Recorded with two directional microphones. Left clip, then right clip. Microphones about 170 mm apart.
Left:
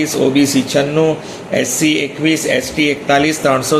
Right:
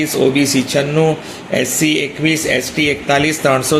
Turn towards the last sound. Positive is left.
turn(degrees=-35)  # may be behind; listen again after turning